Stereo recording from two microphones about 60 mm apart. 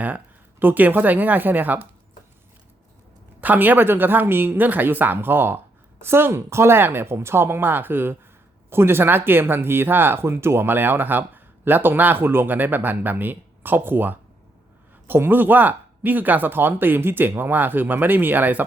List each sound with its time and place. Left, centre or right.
0.6 s speech: right
3.4 s speech: right